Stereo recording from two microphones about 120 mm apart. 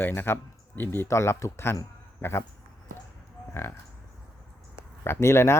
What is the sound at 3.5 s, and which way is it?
Speech, 20° left (ahead or behind).